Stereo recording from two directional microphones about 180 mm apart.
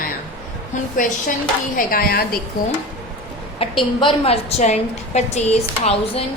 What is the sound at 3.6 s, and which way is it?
A woman's voice, 30° left (ahead or behind).